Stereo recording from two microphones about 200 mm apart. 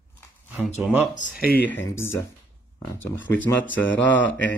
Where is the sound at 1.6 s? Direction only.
10° left (ahead or behind).